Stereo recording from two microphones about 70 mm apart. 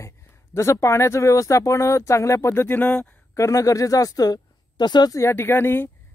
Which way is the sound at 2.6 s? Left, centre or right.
Left.